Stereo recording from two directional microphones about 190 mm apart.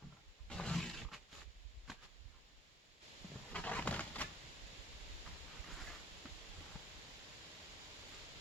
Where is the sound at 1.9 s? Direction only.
Centre (ahead or behind).